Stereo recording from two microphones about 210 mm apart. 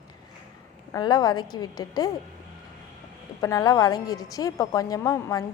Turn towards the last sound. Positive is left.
turn(degrees=15)  # may be behind; listen again after turning